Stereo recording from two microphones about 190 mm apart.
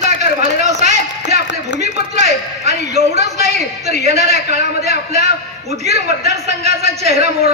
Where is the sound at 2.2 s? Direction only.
40° right (ahead or behind).